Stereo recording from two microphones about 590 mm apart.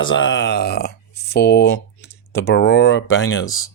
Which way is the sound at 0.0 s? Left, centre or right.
Centre.